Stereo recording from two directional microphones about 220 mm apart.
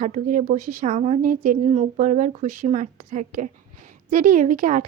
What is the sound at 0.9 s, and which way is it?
A woman's voice, 25° right (ahead or behind).